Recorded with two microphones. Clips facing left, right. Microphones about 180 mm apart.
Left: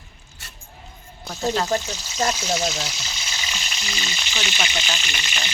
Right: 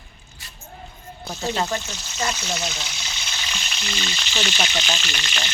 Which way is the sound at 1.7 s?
40° left (ahead or behind).